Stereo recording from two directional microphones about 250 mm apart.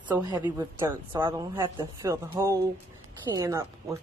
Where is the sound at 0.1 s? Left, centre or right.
Centre.